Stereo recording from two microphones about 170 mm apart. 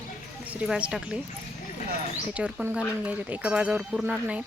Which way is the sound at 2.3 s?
5° right (ahead or behind).